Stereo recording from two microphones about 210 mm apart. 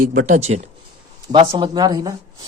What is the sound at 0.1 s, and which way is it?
Speech, 35° right (ahead or behind).